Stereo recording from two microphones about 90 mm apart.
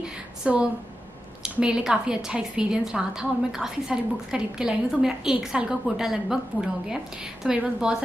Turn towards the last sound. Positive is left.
turn(degrees=-10)  # may be behind; listen again after turning